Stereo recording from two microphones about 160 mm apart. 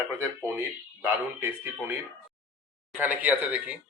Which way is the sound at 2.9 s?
10° right (ahead or behind).